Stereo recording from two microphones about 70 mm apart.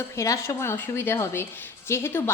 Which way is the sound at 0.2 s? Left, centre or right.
Left.